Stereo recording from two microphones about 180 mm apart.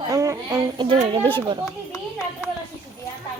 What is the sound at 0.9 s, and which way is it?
Speech, 30° right (ahead or behind).